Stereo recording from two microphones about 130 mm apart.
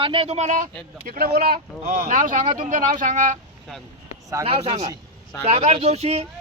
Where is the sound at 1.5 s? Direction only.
90° right.